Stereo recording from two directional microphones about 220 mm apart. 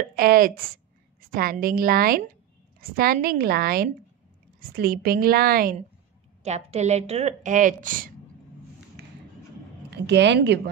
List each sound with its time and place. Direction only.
0.1 s a woman's voice: 40° right (ahead or behind)
6.4 s a woman's voice: 30° right (ahead or behind)
9.8 s a woman's voice: 50° right (ahead or behind)